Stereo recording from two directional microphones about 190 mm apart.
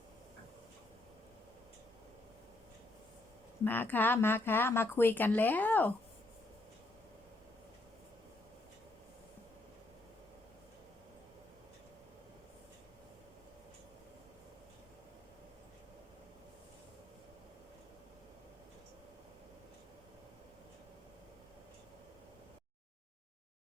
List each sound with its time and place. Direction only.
3.6 s speech: 10° left (ahead or behind)